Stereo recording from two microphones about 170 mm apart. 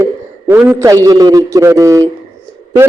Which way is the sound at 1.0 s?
20° right (ahead or behind).